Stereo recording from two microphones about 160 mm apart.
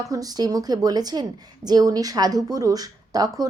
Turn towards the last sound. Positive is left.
turn(degrees=-25)  # may be behind; listen again after turning